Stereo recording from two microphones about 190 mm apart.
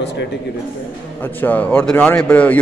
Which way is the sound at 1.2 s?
10° left (ahead or behind).